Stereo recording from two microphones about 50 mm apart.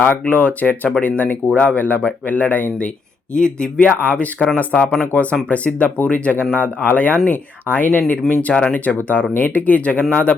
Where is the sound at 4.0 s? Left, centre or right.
Left.